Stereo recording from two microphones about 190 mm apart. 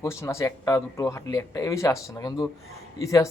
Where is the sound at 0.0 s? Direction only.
15° left (ahead or behind).